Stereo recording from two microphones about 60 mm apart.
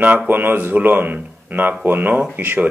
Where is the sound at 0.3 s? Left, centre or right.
Right.